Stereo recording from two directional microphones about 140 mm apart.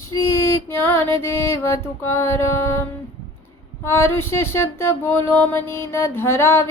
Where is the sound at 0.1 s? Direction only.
25° left (ahead or behind).